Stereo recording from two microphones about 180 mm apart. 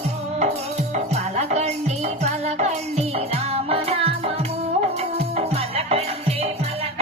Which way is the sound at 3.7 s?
35° right (ahead or behind).